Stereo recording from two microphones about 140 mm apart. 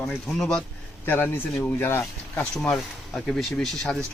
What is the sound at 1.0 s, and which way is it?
Speech, 15° left (ahead or behind).